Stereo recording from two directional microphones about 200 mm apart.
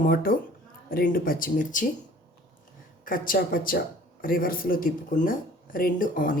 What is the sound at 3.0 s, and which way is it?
Speech, 45° left (ahead or behind).